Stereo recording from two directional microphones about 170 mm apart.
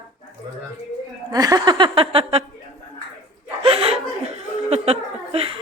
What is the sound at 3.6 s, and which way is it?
Chuckle, 35° right (ahead or behind).